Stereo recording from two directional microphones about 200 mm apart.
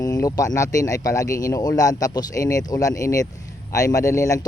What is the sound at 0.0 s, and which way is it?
Speech, 20° left (ahead or behind).